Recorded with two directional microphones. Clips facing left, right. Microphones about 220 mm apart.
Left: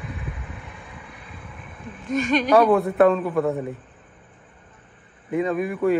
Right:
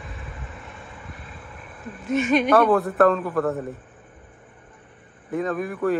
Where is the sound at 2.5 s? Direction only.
Centre (ahead or behind).